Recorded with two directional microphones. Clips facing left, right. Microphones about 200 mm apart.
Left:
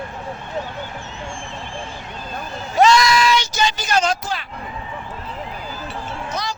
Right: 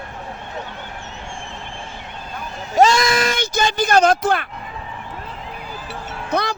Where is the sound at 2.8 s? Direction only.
45° right (ahead or behind).